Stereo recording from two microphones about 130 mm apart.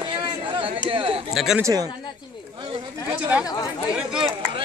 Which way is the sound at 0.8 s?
45° right (ahead or behind).